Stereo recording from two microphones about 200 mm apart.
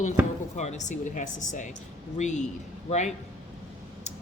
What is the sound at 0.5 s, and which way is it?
Speech, 35° left (ahead or behind).